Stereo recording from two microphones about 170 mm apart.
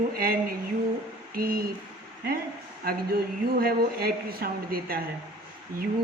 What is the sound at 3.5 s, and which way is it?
Speech, 60° right (ahead or behind).